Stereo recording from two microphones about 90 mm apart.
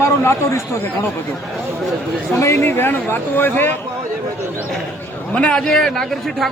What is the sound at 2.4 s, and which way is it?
Speech, 30° left (ahead or behind).